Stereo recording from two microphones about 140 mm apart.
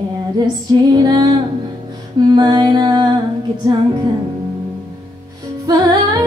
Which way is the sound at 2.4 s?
30° right (ahead or behind).